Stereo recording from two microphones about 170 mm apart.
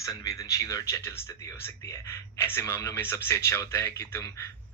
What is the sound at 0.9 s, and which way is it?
Speech, 15° left (ahead or behind).